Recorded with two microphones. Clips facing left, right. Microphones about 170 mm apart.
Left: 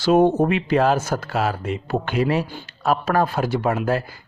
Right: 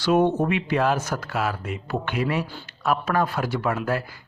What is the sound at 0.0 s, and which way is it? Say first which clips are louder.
Speech: left 4 dB; 30° left (ahead or behind).